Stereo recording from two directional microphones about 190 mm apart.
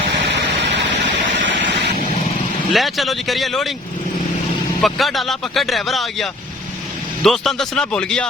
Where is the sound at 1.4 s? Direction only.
70° right (ahead or behind).